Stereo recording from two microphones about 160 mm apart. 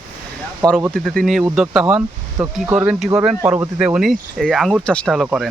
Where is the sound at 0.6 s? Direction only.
25° right (ahead or behind).